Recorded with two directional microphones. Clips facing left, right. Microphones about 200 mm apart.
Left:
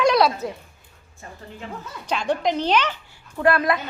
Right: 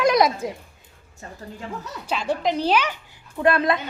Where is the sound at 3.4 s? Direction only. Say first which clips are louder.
Even; 20° right (ahead or behind).